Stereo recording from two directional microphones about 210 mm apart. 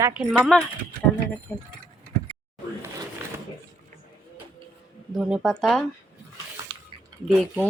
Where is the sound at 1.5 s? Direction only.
15° left (ahead or behind).